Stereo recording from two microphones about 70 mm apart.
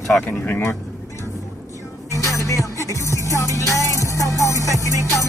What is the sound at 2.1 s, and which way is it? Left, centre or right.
Music, left.